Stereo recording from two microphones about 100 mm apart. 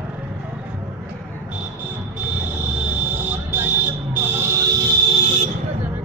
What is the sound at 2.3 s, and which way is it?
Fire alarm, 15° right (ahead or behind).